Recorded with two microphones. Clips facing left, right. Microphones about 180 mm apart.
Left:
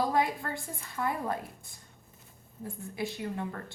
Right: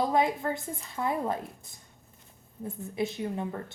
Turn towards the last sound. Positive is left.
turn(degrees=-20)  # may be behind; listen again after turning